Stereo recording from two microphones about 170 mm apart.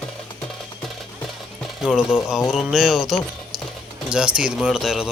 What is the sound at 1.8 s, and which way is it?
Speech, 5° right (ahead or behind).